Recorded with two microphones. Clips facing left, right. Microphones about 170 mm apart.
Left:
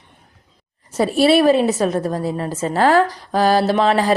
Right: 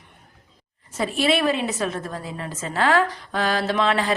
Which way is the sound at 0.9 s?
35° left (ahead or behind).